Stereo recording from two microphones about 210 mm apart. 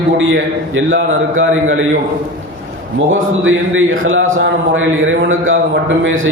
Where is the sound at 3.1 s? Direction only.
70° right (ahead or behind).